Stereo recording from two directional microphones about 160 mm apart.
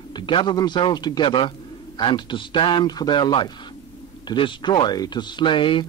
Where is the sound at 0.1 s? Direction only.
30° left (ahead or behind).